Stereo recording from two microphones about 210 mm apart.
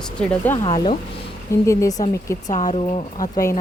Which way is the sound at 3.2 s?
15° left (ahead or behind).